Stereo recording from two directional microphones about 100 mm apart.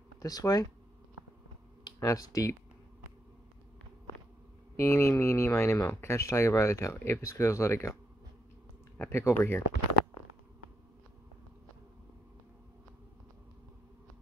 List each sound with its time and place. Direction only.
0.2 s speech: 40° left (ahead or behind)
2.0 s speech: 35° left (ahead or behind)
4.7 s speech: 30° left (ahead or behind)
8.9 s speech: 25° left (ahead or behind)